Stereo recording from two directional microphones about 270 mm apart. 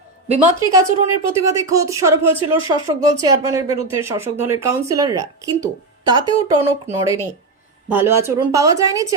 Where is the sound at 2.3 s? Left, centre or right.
Centre.